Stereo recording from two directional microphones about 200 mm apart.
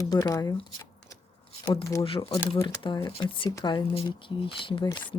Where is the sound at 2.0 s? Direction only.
25° left (ahead or behind).